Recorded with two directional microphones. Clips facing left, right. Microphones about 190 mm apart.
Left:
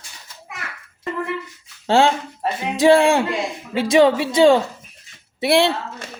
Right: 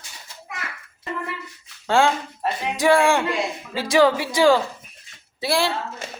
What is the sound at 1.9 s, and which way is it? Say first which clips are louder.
Speech: left 3 dB; 25° left (ahead or behind).